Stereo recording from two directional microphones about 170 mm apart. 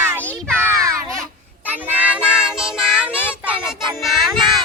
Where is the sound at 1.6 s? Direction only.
10° right (ahead or behind).